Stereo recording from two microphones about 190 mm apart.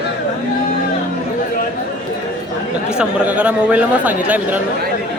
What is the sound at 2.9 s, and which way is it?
Speech, 5° right (ahead or behind).